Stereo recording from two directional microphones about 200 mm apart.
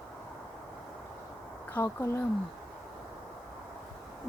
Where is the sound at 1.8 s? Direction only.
15° left (ahead or behind).